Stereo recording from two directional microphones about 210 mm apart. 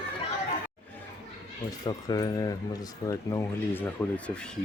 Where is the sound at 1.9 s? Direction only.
20° left (ahead or behind).